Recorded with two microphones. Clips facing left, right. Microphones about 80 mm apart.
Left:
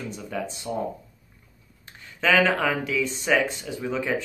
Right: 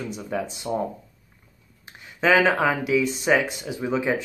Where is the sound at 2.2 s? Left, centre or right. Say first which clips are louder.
Right 2 dB; centre.